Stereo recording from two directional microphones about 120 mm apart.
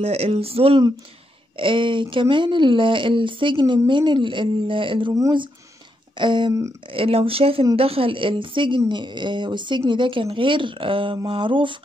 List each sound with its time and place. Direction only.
0.0 s speech: 55° right (ahead or behind)
6.1 s speech: 40° right (ahead or behind)
6.9 s speech: 50° right (ahead or behind)